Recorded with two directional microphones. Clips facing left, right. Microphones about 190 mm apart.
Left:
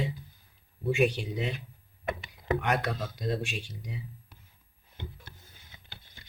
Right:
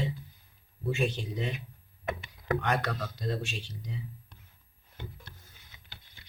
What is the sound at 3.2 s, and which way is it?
Speech, 15° left (ahead or behind).